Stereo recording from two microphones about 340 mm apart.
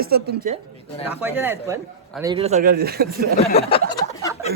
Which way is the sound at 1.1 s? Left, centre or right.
Centre.